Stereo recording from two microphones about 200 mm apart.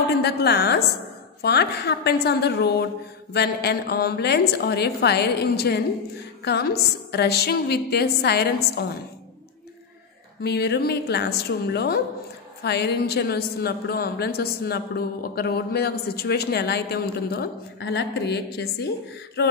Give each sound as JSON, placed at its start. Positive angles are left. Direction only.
{"t": 0.2, "sound": "a woman's voice", "side_deg": 55}
{"t": 10.4, "sound": "a woman's voice", "side_deg": 55}